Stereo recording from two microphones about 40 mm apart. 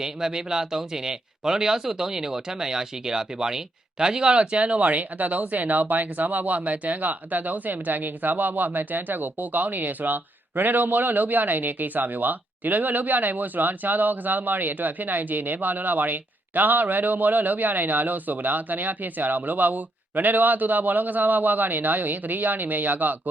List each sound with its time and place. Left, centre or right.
0.0 s speech: centre
4.5 s speech: right